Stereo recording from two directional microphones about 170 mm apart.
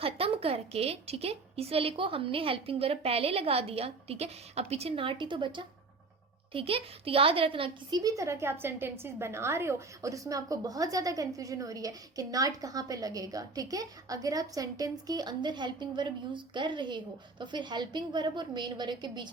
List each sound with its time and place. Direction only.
0.0 s a woman's voice: 35° right (ahead or behind)